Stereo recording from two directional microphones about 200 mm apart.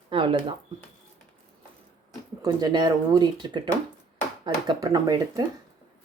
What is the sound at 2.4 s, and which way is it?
Speech, 20° right (ahead or behind).